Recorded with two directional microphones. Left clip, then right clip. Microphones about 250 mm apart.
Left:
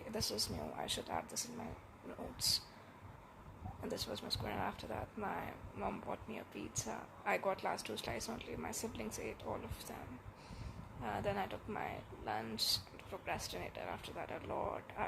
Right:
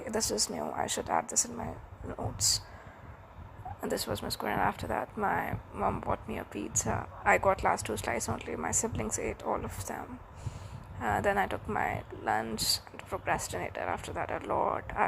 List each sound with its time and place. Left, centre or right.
0.1 s speech: right
3.8 s speech: right
11.0 s speech: right